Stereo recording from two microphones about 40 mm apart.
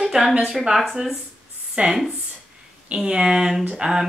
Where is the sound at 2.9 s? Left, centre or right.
Right.